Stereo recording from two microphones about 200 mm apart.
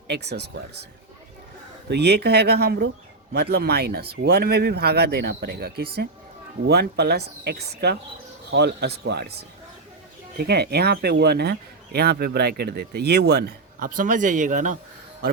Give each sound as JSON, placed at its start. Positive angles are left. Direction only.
{"t": 0.1, "sound": "a man's voice", "side_deg": -55}
{"t": 1.9, "sound": "a man's voice", "side_deg": -55}
{"t": 10.3, "sound": "speech", "side_deg": -55}